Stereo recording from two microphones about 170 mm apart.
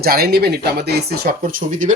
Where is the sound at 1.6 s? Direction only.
45° right (ahead or behind).